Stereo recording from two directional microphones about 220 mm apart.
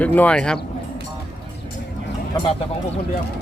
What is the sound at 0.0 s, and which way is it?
Speech, 5° left (ahead or behind).